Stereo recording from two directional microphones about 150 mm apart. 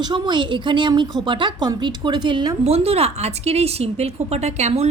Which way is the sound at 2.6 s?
40° right (ahead or behind).